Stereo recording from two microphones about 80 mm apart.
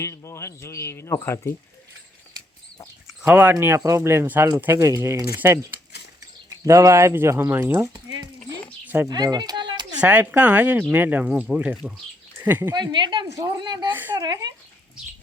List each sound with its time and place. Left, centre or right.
0.0 s speech: left
3.2 s a woman's voice: right
3.5 s a woman's voice: right
6.7 s speech: right
9.0 s a sound: right
10.0 s speech: centre
12.7 s a woman's voice: right
13.2 s a woman's voice: right
13.6 s a woman's voice: right
13.9 s a woman's voice: right
14.2 s speech: right